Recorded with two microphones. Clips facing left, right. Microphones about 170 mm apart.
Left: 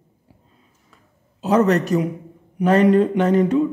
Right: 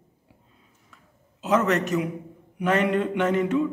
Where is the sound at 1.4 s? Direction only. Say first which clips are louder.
Left 5 dB; 35° left (ahead or behind).